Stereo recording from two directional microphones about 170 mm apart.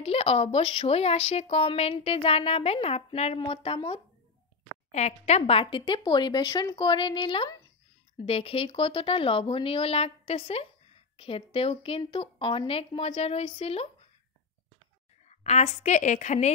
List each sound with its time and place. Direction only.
0.0 s speech: 35° left (ahead or behind)
15.2 s a woman's voice: 40° left (ahead or behind)